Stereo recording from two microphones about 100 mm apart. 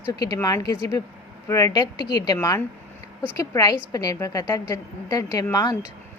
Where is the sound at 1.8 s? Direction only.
45° left (ahead or behind).